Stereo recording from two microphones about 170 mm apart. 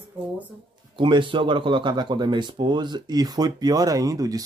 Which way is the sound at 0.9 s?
30° right (ahead or behind).